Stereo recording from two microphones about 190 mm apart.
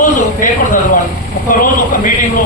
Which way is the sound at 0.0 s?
45° left (ahead or behind).